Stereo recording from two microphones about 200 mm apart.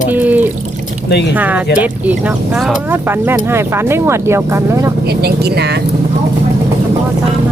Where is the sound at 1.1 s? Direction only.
55° left (ahead or behind).